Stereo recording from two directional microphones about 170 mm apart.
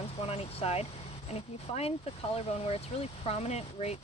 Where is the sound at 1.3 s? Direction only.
35° left (ahead or behind).